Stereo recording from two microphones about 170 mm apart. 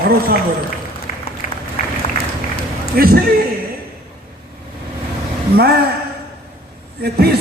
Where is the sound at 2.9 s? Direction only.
60° right (ahead or behind).